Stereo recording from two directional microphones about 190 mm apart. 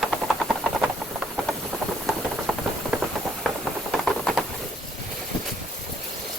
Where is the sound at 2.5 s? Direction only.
Centre (ahead or behind).